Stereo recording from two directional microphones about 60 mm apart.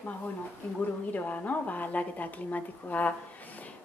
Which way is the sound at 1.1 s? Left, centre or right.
Left.